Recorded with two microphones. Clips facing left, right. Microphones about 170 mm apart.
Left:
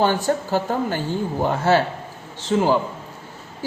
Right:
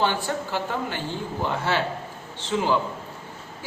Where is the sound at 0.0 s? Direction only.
40° left (ahead or behind).